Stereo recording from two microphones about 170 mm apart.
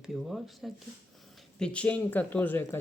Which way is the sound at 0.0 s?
Centre (ahead or behind).